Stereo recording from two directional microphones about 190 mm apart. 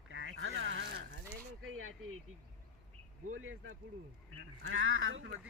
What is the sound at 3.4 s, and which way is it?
Speech, 90° right.